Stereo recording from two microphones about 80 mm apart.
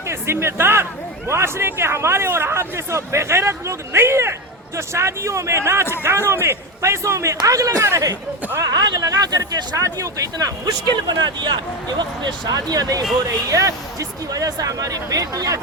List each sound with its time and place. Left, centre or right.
0.1 s speech: right
8.6 s speech: right
11.4 s speech: right